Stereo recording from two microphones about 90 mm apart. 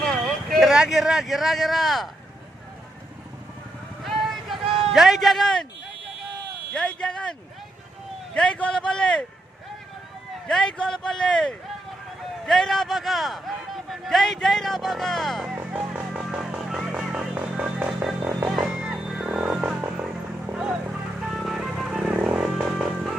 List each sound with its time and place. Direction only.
0.3 s vehicle: 5° left (ahead or behind)
0.7 s a man's voice: 5° right (ahead or behind)
4.0 s vehicle: centre (ahead or behind)
4.9 s a man's voice: centre (ahead or behind)
6.7 s speech: 10° left (ahead or behind)
8.4 s speech: 10° left (ahead or behind)
10.4 s a man's voice: 10° left (ahead or behind)
15.5 s music: 15° right (ahead or behind)
19.5 s music: 20° right (ahead or behind)
20.0 s music: 10° right (ahead or behind)